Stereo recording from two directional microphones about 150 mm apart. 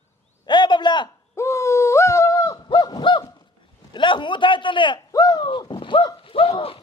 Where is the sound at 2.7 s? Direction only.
30° left (ahead or behind).